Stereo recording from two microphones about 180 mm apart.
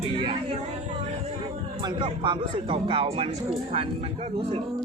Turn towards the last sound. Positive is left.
turn(degrees=-30)  # may be behind; listen again after turning